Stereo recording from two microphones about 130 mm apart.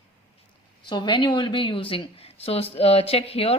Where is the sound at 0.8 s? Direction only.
35° left (ahead or behind).